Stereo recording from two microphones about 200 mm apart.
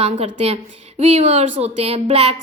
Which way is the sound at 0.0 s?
30° right (ahead or behind).